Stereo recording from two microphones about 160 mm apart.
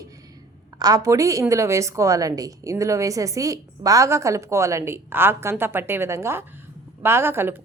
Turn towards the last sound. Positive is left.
turn(degrees=-15)  # may be behind; listen again after turning